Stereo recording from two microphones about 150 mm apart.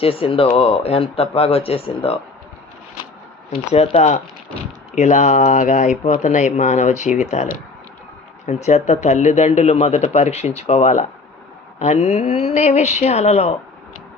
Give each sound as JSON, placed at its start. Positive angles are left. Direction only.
{"t": 0.0, "sound": "speech", "side_deg": 40}
{"t": 3.8, "sound": "speech", "side_deg": 50}
{"t": 8.4, "sound": "speech", "side_deg": 50}